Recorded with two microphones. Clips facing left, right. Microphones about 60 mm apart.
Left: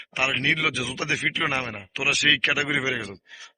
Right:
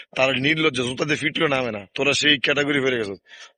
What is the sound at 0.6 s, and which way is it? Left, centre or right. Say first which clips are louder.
Speech: right 5 dB; left.